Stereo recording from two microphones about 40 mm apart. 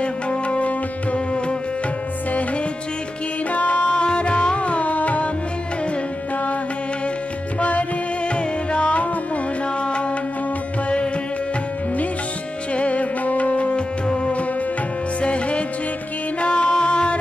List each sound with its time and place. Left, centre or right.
0.0 s music: left
3.5 s music: left
8.4 s music: left
12.7 s music: left